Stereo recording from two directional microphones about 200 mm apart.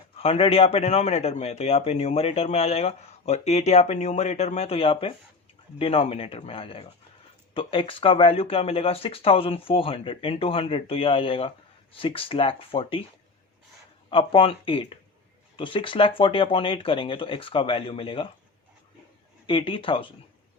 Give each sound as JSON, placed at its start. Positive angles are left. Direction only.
{"t": 0.2, "sound": "a man's voice", "side_deg": 30}
{"t": 14.1, "sound": "speech", "side_deg": 25}
{"t": 19.5, "sound": "speech", "side_deg": 25}